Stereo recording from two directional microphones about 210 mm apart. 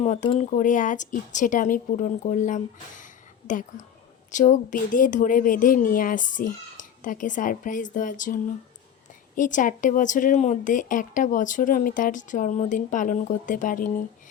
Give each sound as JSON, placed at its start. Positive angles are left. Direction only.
{"t": 0.0, "sound": "speech", "side_deg": 35}
{"t": 3.0, "sound": "a sound", "side_deg": 40}
{"t": 4.3, "sound": "speech", "side_deg": 35}